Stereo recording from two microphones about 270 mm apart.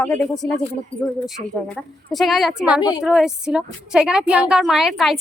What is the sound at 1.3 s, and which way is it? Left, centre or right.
A woman's voice, centre.